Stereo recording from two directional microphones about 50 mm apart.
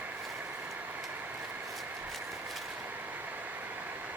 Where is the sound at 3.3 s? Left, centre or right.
Right.